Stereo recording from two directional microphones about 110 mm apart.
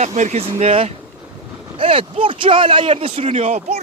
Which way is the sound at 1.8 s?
50° right (ahead or behind).